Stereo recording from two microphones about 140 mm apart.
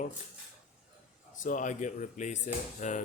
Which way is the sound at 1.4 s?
70° left (ahead or behind).